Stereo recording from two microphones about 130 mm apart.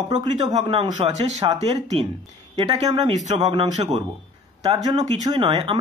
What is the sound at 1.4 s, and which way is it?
Speech, 55° right (ahead or behind).